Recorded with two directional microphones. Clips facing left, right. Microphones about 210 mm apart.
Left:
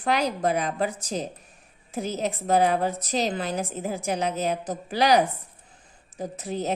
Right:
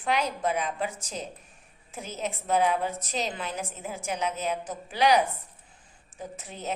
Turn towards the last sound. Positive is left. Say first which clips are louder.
# left 7 dB
turn(degrees=35)  # may be behind; listen again after turning